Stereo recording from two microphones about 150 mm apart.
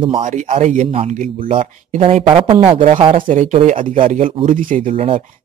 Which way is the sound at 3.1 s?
60° right (ahead or behind).